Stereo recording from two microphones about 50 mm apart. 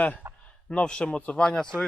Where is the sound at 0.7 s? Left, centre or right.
Centre.